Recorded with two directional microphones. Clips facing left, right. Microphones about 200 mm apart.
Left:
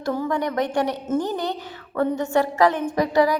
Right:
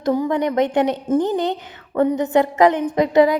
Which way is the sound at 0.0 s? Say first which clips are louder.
Right 5 dB; 15° right (ahead or behind).